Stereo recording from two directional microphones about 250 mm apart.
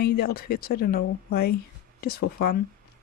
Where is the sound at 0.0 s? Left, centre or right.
Left.